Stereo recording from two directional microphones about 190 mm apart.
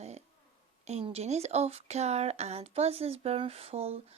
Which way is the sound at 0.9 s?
35° right (ahead or behind).